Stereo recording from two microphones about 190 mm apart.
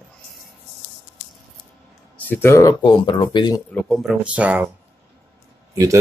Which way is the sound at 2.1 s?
10° left (ahead or behind).